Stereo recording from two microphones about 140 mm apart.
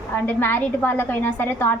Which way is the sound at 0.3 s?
15° left (ahead or behind).